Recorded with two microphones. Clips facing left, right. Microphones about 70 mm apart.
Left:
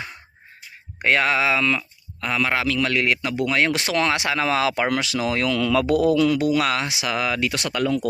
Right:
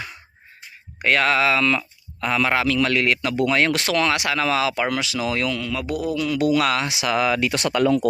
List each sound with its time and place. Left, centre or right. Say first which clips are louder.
0.9 s speech: even; left
1.2 s speech: right 1 dB; centre
2.2 s a man's voice: right 2 dB; centre
3.7 s speech: right 1 dB; left
4.6 s speech: left 1 dB; left
5.5 s speech: left 6 dB; left
6.4 s speech: right 1 dB; left
7.1 s speech: right 4 dB; centre
7.5 s speech: right 4 dB; right